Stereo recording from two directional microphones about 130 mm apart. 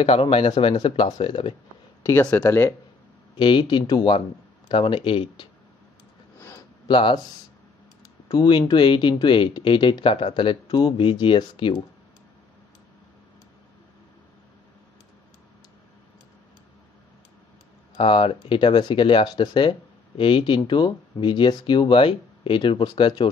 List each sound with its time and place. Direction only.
0.0 s speech: 45° left (ahead or behind)
2.0 s speech: 20° left (ahead or behind)
3.3 s speech: 40° left (ahead or behind)
6.9 s speech: 40° left (ahead or behind)
8.3 s speech: 35° left (ahead or behind)
17.9 s speech: 45° left (ahead or behind)